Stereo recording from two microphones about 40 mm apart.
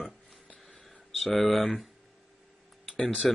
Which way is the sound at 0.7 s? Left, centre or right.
Centre.